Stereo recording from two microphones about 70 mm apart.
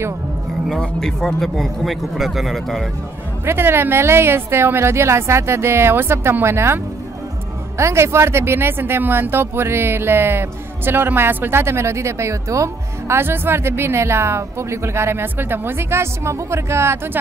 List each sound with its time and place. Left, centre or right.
0.7 s speech: centre
3.4 s speech: right
13.2 s speech: right